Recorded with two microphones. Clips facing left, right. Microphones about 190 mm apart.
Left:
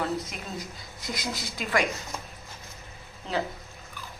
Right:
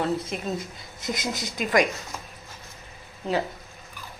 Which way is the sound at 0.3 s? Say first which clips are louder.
Right 7 dB; 25° right (ahead or behind).